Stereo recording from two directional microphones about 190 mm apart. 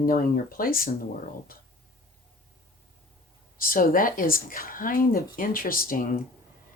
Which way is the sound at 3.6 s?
50° left (ahead or behind).